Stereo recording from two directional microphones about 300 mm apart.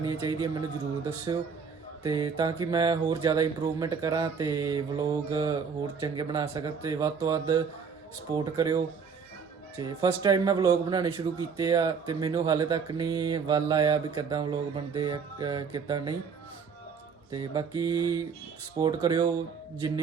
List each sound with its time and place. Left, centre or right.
0.0 s speech: centre
2.0 s speech: centre
17.3 s speech: centre